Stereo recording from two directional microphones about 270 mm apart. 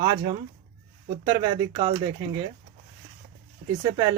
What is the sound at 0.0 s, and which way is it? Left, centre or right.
Speech, centre.